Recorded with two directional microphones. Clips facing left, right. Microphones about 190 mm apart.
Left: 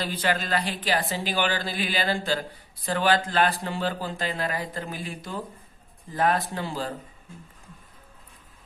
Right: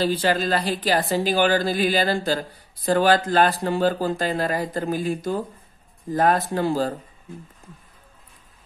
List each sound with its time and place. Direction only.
0.0 s a woman's voice: 30° right (ahead or behind)